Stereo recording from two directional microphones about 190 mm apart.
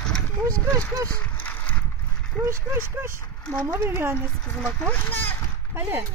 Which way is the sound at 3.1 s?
10° left (ahead or behind).